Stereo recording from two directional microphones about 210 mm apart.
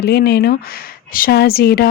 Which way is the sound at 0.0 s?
50° left (ahead or behind).